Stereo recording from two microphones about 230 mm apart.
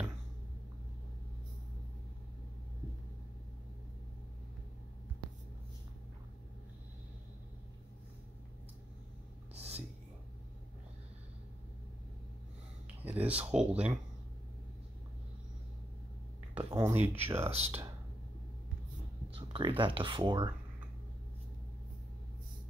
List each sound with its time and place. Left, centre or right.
9.6 s whispering: right
12.8 s speech: centre
16.5 s a sound: centre
17.1 s speech: centre
17.5 s speech: right
19.3 s speech: right